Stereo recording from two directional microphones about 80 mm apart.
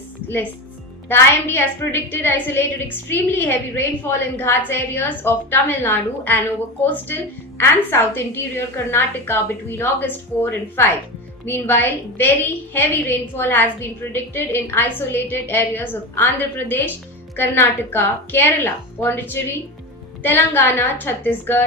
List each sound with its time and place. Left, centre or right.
1.0 s a woman's voice: left